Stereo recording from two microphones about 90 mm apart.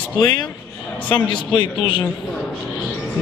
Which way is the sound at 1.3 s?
60° left (ahead or behind).